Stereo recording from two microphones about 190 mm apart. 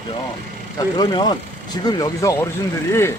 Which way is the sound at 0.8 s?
25° left (ahead or behind).